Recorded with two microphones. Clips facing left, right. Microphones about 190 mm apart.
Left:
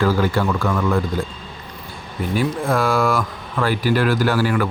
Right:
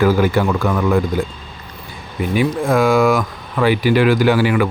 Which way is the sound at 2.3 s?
15° right (ahead or behind).